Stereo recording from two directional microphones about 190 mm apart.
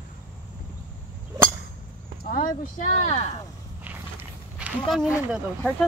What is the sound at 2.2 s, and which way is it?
Speech, 45° left (ahead or behind).